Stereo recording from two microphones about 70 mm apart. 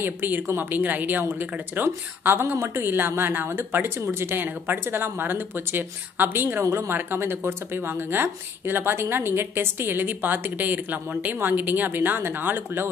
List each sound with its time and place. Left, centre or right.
0.0 s a woman's voice: right
6.6 s a woman's voice: right
6.9 s a woman's voice: right